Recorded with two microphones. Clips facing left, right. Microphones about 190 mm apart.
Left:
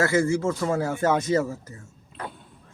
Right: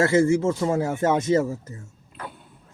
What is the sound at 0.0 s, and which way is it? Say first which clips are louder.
Speech: right 3 dB; 25° right (ahead or behind).